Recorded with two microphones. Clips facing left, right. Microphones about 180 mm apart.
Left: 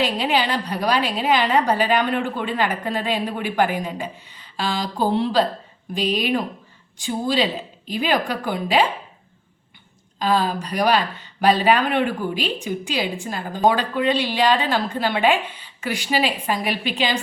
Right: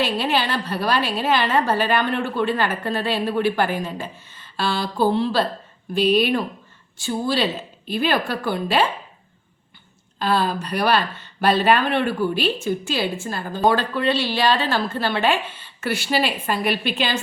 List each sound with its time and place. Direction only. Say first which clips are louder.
0.0 s speech: left 1 dB; 15° left (ahead or behind)
10.2 s speech: left 1 dB; 15° left (ahead or behind)